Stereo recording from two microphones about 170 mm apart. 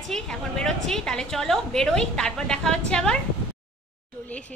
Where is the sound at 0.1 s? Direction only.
5° left (ahead or behind).